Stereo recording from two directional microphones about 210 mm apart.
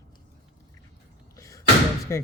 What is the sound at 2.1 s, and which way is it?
Speech, 15° left (ahead or behind).